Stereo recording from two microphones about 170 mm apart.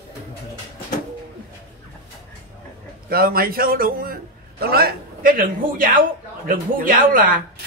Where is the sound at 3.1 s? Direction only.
60° right (ahead or behind).